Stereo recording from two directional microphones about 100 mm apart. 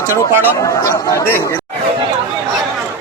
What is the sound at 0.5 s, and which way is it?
Speech, 35° left (ahead or behind).